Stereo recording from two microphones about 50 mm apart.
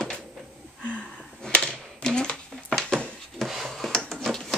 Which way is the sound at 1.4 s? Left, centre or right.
Centre.